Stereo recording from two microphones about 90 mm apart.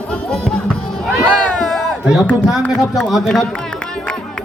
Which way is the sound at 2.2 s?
15° left (ahead or behind).